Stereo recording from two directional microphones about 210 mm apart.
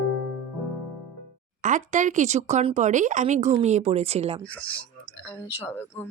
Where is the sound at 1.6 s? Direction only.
35° right (ahead or behind).